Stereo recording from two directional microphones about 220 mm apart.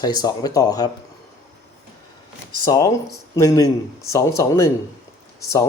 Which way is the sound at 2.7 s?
15° left (ahead or behind).